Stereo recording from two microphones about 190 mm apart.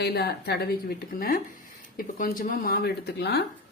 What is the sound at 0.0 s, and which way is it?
Speech, 55° left (ahead or behind).